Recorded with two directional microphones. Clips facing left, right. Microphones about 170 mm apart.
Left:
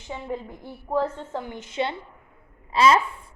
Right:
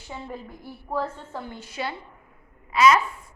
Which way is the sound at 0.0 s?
20° left (ahead or behind).